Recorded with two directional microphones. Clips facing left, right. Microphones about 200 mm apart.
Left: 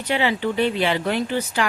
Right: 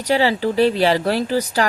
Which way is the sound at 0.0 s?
35° right (ahead or behind).